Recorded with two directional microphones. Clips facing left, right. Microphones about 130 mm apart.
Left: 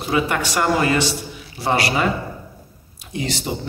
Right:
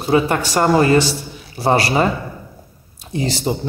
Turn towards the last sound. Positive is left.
turn(degrees=-35)  # may be behind; listen again after turning